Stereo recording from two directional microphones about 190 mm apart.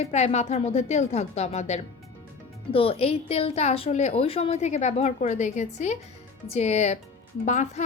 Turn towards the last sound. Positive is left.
turn(degrees=40)  # may be behind; listen again after turning